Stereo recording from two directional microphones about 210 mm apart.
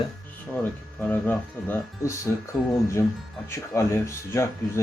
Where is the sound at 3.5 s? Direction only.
10° left (ahead or behind).